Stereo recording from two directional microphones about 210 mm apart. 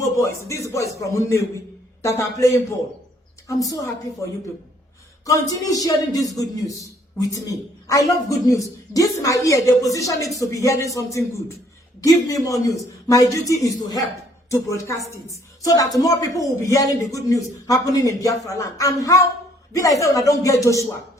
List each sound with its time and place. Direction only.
0.0 s speech: 15° left (ahead or behind)
5.2 s a man's voice: 15° left (ahead or behind)